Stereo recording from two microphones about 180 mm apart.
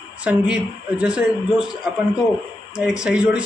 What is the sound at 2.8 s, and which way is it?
Speech, 5° right (ahead or behind).